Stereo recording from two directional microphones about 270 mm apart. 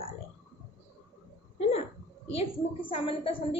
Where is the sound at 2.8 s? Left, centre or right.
Centre.